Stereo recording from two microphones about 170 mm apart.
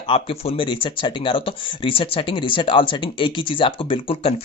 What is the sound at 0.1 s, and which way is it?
Speech, 35° left (ahead or behind).